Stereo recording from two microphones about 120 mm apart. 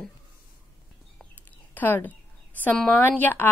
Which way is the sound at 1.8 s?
15° left (ahead or behind).